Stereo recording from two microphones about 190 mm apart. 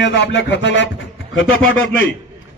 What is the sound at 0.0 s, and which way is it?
Music, 65° left (ahead or behind).